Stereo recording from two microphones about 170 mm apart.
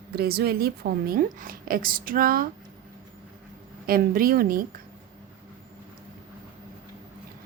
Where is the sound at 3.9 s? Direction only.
60° right (ahead or behind).